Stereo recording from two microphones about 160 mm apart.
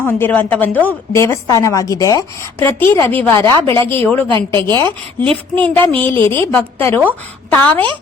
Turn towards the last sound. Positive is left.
turn(degrees=10)  # may be behind; listen again after turning